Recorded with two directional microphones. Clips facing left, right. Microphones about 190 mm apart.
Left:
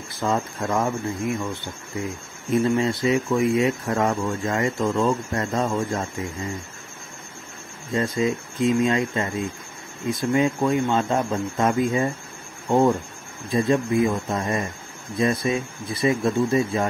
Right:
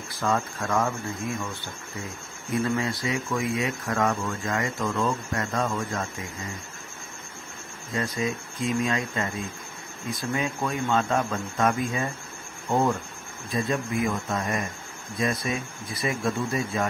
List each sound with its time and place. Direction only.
0.1 s speech: 25° left (ahead or behind)
7.9 s speech: 25° left (ahead or behind)
13.5 s speech: 30° left (ahead or behind)